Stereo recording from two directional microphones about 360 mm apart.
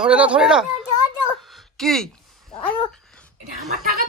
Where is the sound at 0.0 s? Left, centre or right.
Centre.